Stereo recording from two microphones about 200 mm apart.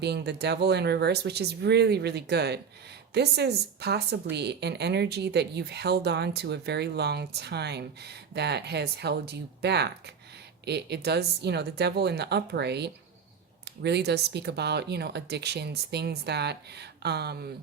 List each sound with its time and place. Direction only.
0.0 s a woman's voice: 55° right (ahead or behind)